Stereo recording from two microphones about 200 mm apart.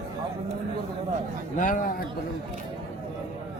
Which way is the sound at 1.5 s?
40° left (ahead or behind).